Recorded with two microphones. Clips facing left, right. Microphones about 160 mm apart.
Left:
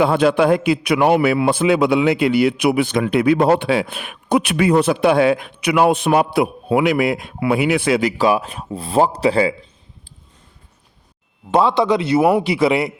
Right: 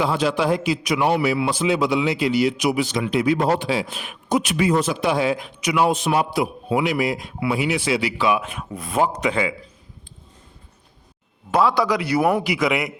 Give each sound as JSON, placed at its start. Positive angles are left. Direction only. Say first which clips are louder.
{"t": 0.0, "sound": "a man's voice", "louder": "left 6 dB", "side_deg": 55}
{"t": 11.5, "sound": "a man's voice", "louder": "left 4 dB", "side_deg": 25}